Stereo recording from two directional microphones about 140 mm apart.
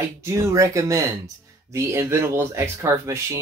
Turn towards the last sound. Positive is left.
turn(degrees=-20)  # may be behind; listen again after turning